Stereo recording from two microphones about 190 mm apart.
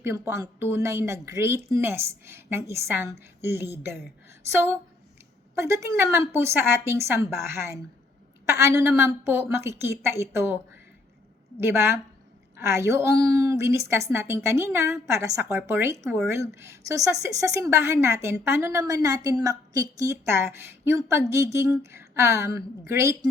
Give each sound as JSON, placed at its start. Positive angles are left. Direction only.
{"t": 0.0, "sound": "speech", "side_deg": -15}
{"t": 5.5, "sound": "speech", "side_deg": -15}